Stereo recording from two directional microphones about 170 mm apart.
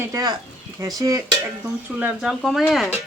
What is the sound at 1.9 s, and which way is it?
Speech, 5° right (ahead or behind).